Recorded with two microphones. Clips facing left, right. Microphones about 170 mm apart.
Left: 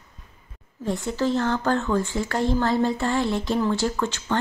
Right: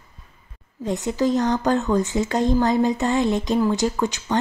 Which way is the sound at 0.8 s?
20° right (ahead or behind).